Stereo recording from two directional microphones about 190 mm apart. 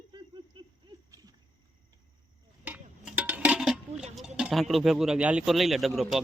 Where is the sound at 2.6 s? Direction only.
10° right (ahead or behind).